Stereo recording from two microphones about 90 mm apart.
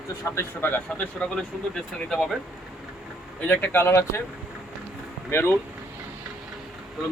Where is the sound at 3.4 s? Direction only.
20° left (ahead or behind).